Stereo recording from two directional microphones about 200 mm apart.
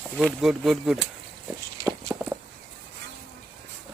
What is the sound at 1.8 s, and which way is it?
Horse, 15° right (ahead or behind).